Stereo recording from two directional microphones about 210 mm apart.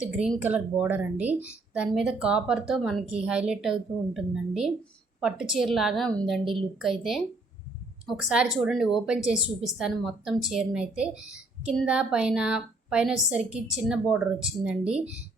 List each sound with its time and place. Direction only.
0.0 s speech: 5° right (ahead or behind)